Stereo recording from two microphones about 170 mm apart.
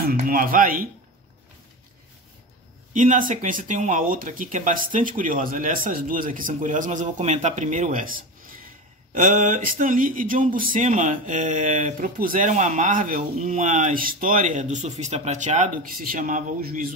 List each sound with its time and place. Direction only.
0.1 s speech: 55° right (ahead or behind)
2.9 s speech: 50° right (ahead or behind)